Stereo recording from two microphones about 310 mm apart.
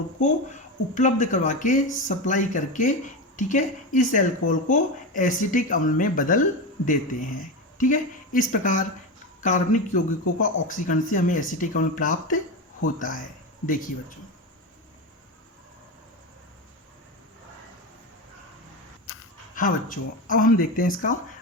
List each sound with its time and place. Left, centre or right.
0.2 s speech: left
19.5 s speech: left